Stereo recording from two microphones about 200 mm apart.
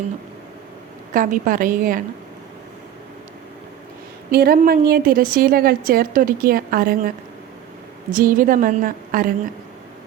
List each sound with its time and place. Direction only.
1.1 s a woman's voice: 40° right (ahead or behind)
4.3 s a woman's voice: 50° right (ahead or behind)
8.1 s a woman's voice: 45° right (ahead or behind)